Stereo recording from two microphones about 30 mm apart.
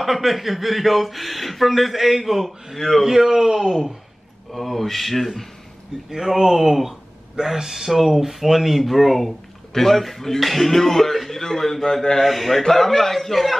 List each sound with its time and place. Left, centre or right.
0.0 s speech: centre
4.5 s speech: centre
6.0 s speech: centre
10.4 s speech: centre
12.2 s speech: centre